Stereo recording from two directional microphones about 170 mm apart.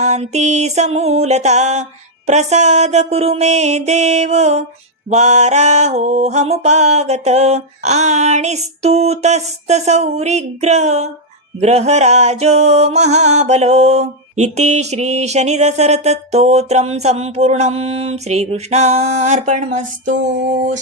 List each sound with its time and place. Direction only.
0.0 s music: 40° right (ahead or behind)